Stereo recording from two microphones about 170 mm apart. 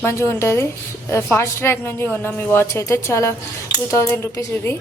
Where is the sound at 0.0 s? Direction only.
15° left (ahead or behind).